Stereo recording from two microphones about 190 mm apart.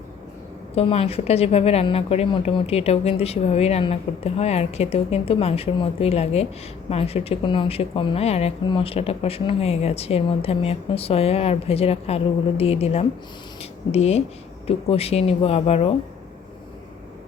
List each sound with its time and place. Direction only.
0.8 s speech: 30° left (ahead or behind)